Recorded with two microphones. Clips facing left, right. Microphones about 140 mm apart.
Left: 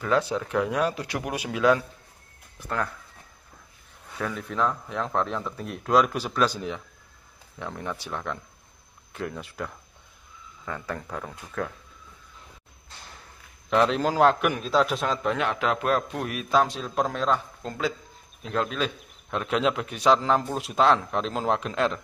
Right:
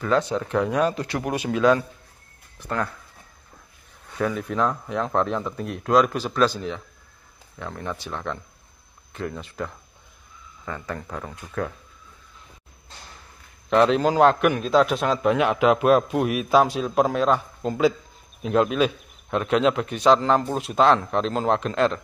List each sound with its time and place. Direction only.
0.0 s speech: 5° left (ahead or behind)
4.1 s speech: 5° right (ahead or behind)
9.4 s speech: 5° left (ahead or behind)
13.7 s a man's voice: centre (ahead or behind); by 18.9 s 15° right (ahead or behind)
19.3 s speech: centre (ahead or behind)